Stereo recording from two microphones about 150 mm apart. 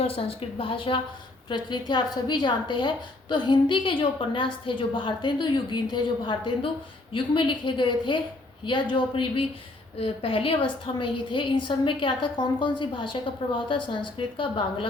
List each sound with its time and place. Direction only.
0.0 s a woman's voice: 40° left (ahead or behind)